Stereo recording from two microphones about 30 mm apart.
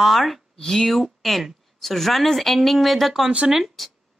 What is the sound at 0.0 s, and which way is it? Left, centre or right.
Speech, centre.